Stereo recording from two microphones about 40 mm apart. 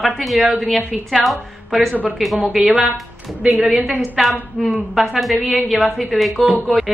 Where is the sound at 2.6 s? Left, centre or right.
Right.